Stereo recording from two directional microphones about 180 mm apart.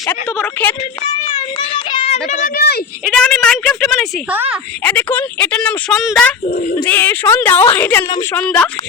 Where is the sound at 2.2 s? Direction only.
40° left (ahead or behind).